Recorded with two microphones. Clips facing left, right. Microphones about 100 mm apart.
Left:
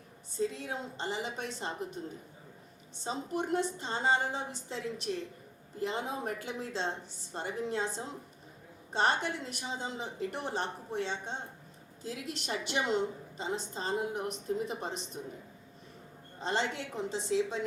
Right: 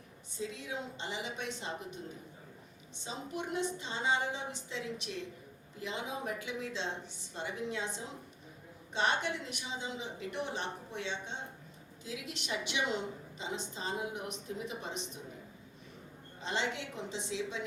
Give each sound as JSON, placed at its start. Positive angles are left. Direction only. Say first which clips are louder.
{"t": 0.3, "sound": "a woman's voice", "louder": "left 5 dB", "side_deg": 45}
{"t": 3.0, "sound": "a woman's voice", "louder": "left 5 dB", "side_deg": 40}
{"t": 8.9, "sound": "a woman's voice", "louder": "left 3 dB", "side_deg": 40}
{"t": 16.4, "sound": "a woman's voice", "louder": "left 3 dB", "side_deg": 40}